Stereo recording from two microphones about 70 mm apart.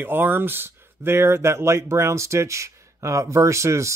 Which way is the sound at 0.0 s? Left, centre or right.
Right.